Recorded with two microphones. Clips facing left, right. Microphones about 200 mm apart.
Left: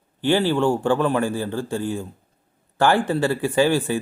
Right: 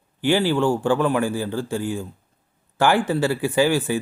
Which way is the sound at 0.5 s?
15° left (ahead or behind).